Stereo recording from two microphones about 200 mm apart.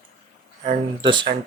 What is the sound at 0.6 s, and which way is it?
Speech, 25° right (ahead or behind).